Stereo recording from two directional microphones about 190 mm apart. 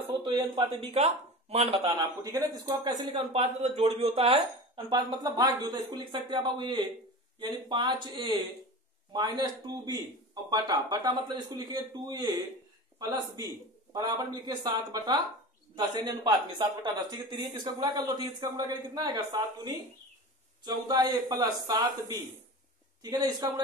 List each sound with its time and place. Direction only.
0.4 s speech: 25° right (ahead or behind)
3.3 s speech: 35° right (ahead or behind); by 23.6 s 20° right (ahead or behind)